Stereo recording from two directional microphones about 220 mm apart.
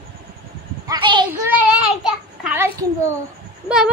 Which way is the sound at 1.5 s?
5° right (ahead or behind).